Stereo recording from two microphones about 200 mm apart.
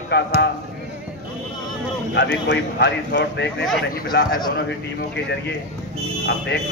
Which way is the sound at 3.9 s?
45° left (ahead or behind).